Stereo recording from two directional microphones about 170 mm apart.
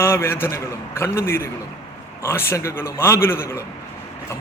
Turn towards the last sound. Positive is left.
turn(degrees=15)  # may be behind; listen again after turning